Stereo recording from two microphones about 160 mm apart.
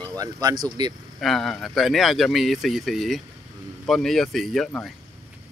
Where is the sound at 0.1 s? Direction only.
20° right (ahead or behind).